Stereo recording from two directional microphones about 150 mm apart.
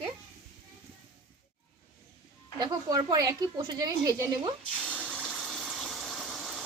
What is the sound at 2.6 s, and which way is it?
A woman's voice, 25° right (ahead or behind).